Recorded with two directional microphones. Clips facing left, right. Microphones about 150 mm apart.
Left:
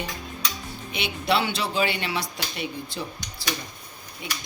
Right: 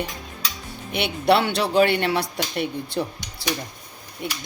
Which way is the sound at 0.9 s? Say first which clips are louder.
Right 6 dB; 60° right (ahead or behind).